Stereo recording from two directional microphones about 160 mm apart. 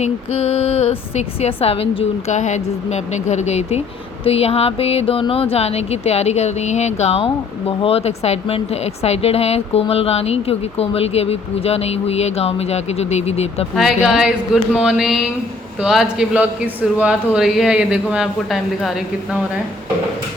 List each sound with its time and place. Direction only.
0.0 s speech: 40° left (ahead or behind)
13.7 s a man's voice: 5° right (ahead or behind)